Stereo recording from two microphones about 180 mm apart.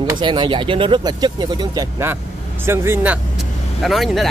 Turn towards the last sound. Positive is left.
turn(degrees=0)  # may be behind; listen again after turning